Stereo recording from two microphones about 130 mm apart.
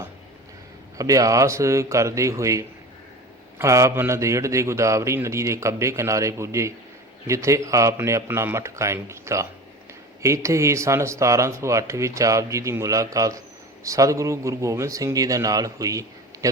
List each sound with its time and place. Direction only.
0.9 s speech: 25° right (ahead or behind)